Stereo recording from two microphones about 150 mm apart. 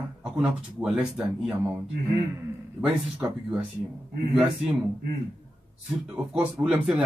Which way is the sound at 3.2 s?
15° right (ahead or behind).